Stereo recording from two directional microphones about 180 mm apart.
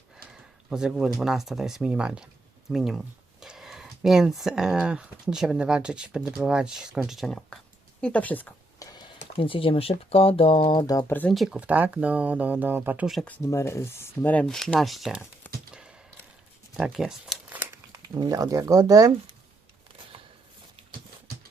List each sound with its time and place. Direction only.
0.3 s speech: 5° right (ahead or behind)
9.4 s speech: 30° left (ahead or behind)
11.1 s speech: 5° left (ahead or behind)
15.7 s a sound: 5° right (ahead or behind)
16.7 s shuffling cards: centre (ahead or behind)
18.1 s speech: 20° right (ahead or behind)